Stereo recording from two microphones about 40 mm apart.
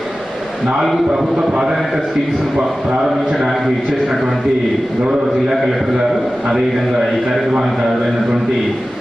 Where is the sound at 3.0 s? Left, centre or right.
Centre.